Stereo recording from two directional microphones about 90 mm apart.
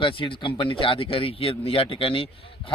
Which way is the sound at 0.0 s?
70° left (ahead or behind).